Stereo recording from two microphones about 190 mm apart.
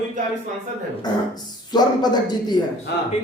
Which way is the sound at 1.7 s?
20° left (ahead or behind).